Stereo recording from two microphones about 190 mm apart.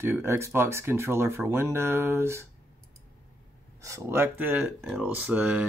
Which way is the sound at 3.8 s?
15° right (ahead or behind).